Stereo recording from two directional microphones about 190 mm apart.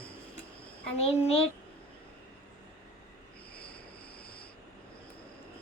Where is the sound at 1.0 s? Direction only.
30° left (ahead or behind).